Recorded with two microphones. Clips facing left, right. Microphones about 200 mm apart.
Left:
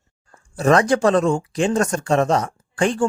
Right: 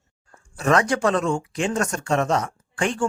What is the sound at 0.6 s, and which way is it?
Speech, 35° left (ahead or behind).